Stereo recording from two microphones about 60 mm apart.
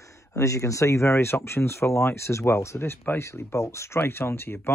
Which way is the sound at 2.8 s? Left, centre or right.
Left.